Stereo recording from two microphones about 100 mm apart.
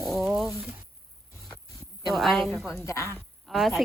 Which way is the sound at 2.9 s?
30° left (ahead or behind).